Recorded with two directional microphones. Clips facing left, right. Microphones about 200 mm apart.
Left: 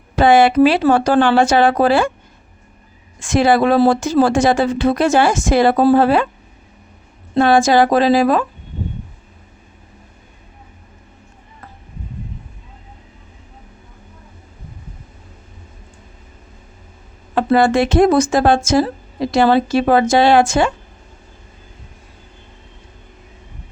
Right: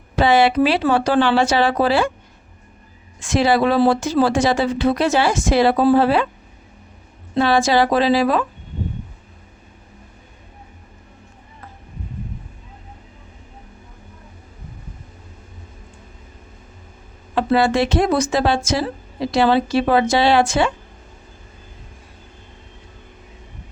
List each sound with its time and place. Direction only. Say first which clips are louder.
0.2 s speech: left 4 dB; 50° left (ahead or behind)
3.2 s speech: left 3 dB; 50° left (ahead or behind)
7.3 s speech: left 4 dB; 50° left (ahead or behind)
17.3 s speech: left 3 dB; 50° left (ahead or behind)